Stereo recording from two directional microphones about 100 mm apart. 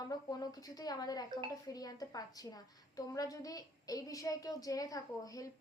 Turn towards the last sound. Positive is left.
turn(degrees=35)  # may be behind; listen again after turning